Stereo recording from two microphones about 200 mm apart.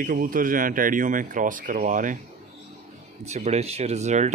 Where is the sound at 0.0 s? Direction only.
45° right (ahead or behind).